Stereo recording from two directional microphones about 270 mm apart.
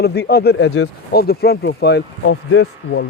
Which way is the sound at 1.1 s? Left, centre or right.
Left.